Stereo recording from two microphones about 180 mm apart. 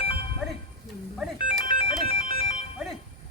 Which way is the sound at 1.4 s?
25° left (ahead or behind).